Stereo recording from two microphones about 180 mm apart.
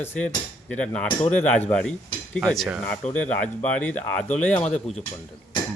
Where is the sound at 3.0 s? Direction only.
40° left (ahead or behind).